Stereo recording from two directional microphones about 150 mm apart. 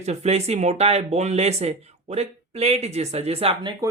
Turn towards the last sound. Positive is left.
turn(degrees=-40)  # may be behind; listen again after turning